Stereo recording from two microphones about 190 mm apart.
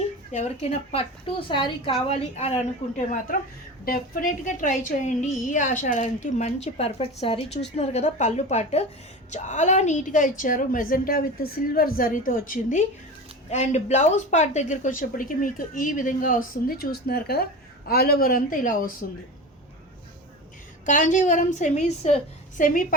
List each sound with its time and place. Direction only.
0.3 s a woman's voice: 35° left (ahead or behind)
20.8 s a woman's voice: 40° left (ahead or behind)